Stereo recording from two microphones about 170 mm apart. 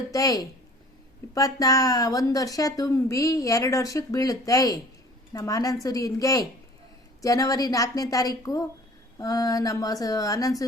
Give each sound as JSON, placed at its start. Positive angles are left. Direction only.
{"t": 0.1, "sound": "a woman's voice", "side_deg": 20}